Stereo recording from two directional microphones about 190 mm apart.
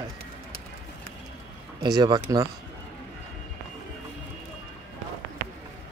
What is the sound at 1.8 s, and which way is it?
Speech, 20° right (ahead or behind).